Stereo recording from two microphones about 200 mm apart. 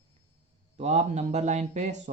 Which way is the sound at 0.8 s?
35° right (ahead or behind).